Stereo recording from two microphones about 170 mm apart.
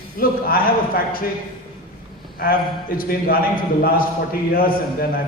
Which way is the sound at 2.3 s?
60° left (ahead or behind).